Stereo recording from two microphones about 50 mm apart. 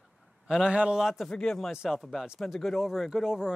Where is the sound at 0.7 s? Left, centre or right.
Right.